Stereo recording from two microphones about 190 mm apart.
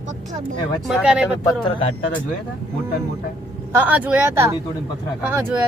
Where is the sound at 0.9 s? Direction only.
5° right (ahead or behind).